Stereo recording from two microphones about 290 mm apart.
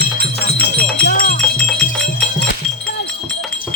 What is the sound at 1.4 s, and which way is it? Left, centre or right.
Music, centre.